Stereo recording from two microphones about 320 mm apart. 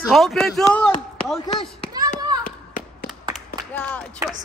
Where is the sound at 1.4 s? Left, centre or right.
Centre.